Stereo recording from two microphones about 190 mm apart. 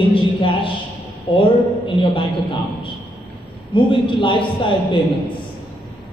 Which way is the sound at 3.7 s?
25° left (ahead or behind).